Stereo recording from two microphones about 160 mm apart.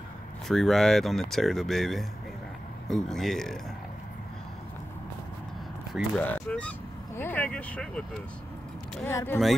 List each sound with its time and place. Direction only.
0.5 s speech: centre (ahead or behind)
6.1 s speech: 10° left (ahead or behind)
9.0 s speech: 15° left (ahead or behind)